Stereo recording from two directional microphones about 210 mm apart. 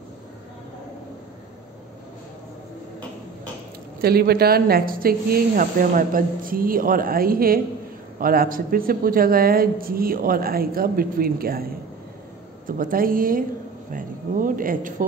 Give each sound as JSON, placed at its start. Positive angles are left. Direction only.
{"t": 4.0, "sound": "a woman's voice", "side_deg": -50}
{"t": 12.6, "sound": "a woman's voice", "side_deg": -40}